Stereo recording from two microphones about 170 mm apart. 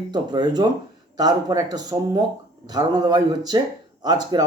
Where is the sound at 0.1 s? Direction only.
25° right (ahead or behind).